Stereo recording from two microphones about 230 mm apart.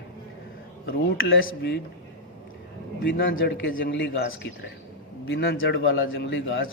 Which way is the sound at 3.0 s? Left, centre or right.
Left.